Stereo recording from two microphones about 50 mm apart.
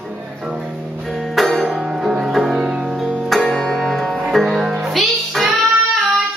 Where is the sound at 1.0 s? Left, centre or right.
Centre.